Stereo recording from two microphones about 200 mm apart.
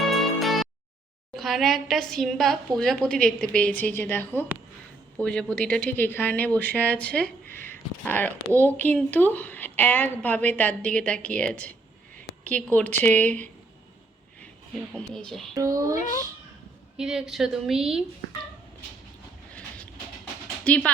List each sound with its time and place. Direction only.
0.1 s music: centre (ahead or behind)
1.4 s a woman's voice: centre (ahead or behind)
14.9 s a woman's voice: 5° left (ahead or behind)
15.5 s a sound: 15° right (ahead or behind)
17.0 s a woman's voice: 5° right (ahead or behind)
20.7 s a woman's voice: 5° left (ahead or behind)